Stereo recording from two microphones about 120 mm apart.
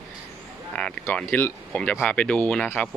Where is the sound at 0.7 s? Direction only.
10° left (ahead or behind).